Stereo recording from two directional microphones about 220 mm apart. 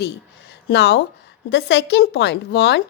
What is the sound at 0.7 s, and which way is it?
Speech, 50° left (ahead or behind).